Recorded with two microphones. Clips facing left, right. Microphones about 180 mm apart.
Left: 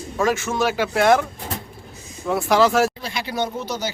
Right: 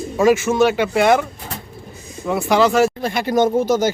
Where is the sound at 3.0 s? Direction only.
50° right (ahead or behind).